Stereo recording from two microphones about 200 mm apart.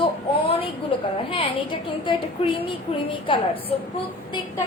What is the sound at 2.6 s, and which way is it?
A woman's voice, 25° left (ahead or behind).